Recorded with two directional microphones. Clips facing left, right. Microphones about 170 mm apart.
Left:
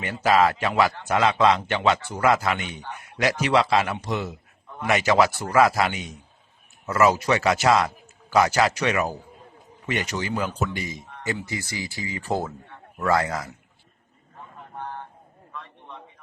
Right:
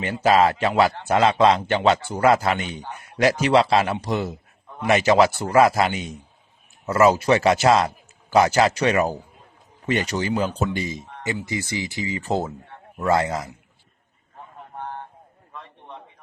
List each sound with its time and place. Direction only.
0.0 s a man's voice: 30° right (ahead or behind)